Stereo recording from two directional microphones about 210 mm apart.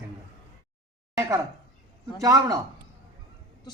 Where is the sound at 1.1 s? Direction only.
15° right (ahead or behind).